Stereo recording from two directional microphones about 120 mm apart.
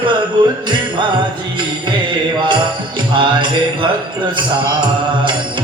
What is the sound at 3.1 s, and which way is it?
Music, 40° right (ahead or behind).